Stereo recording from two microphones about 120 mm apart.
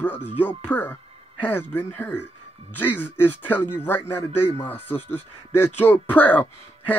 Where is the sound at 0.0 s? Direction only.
15° left (ahead or behind).